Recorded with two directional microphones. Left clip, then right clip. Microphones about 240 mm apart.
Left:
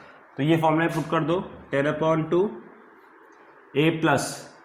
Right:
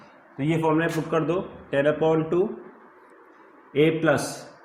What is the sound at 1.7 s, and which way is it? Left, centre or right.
Speech, centre.